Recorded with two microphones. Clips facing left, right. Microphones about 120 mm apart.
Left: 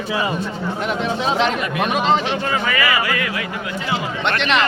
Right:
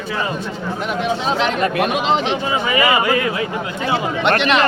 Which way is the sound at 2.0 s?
15° right (ahead or behind).